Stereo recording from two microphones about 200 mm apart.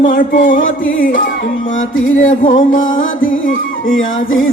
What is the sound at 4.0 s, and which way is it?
Music, 75° left (ahead or behind).